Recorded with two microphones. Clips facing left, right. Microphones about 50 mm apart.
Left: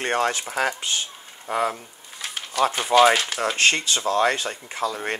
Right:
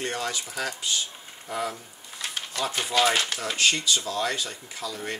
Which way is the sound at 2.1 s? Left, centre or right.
Centre.